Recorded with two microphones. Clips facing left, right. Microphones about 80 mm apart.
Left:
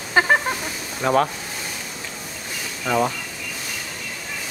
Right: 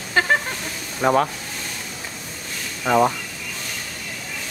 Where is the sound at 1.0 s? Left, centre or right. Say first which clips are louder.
Right 2 dB; centre.